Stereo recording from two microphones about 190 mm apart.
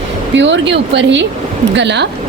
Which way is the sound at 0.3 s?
70° right (ahead or behind).